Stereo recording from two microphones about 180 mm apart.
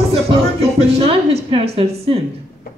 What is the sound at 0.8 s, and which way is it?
A woman's voice, 35° right (ahead or behind).